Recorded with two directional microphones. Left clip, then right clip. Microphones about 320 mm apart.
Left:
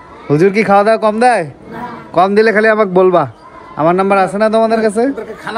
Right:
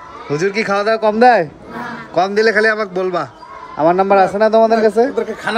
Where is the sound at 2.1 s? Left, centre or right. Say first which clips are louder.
Left 4 dB; centre.